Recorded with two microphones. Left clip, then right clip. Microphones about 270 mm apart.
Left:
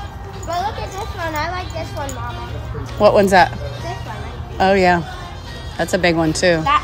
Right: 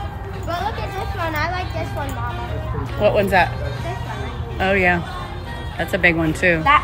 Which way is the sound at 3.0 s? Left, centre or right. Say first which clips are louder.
Left 5 dB; left.